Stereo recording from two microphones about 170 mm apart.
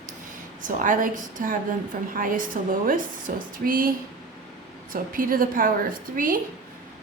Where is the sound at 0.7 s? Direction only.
50° right (ahead or behind).